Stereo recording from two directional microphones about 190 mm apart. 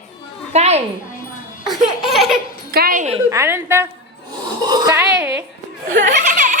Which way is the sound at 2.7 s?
50° right (ahead or behind).